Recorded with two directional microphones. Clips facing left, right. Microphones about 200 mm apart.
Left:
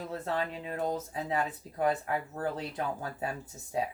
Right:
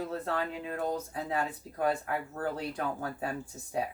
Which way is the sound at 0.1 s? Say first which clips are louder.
Even; 20° left (ahead or behind).